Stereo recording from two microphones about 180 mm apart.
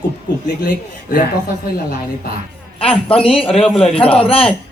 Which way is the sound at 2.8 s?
30° left (ahead or behind).